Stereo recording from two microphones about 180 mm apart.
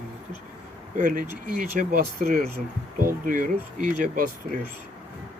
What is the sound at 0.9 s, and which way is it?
Speech, 50° right (ahead or behind).